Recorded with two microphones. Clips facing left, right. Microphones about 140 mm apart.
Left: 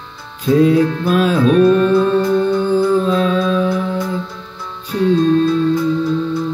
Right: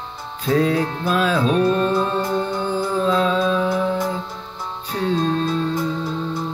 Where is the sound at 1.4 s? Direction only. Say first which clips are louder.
Left 7 dB; 25° right (ahead or behind).